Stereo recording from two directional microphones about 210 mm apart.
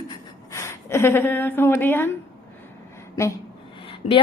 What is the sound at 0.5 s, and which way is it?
A woman's voice, 15° left (ahead or behind).